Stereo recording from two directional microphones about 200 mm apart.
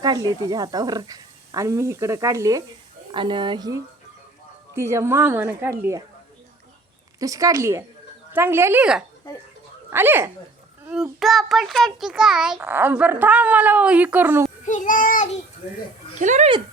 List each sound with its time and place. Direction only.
0.0 s a child's voice: 20° right (ahead or behind)
7.2 s a child's voice: 15° right (ahead or behind)
14.6 s child singing: 40° left (ahead or behind)
16.1 s speech: 35° right (ahead or behind)